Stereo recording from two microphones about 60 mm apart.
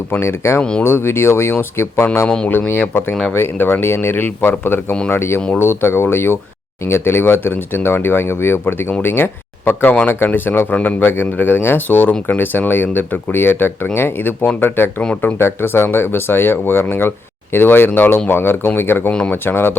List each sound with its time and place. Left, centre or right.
0.1 s speech: left
2.2 s speech: centre
2.5 s speech: left